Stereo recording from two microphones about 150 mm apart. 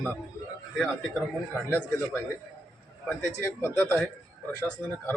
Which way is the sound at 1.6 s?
15° left (ahead or behind).